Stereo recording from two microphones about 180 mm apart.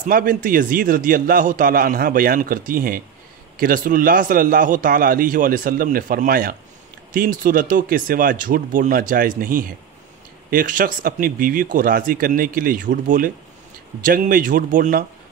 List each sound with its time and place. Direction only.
0.0 s a man's voice: 50° right (ahead or behind)